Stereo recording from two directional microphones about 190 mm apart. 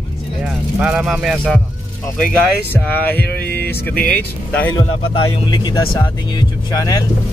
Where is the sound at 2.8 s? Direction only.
10° left (ahead or behind).